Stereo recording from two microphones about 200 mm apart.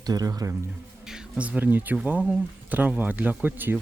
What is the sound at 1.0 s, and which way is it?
Speech, 5° right (ahead or behind).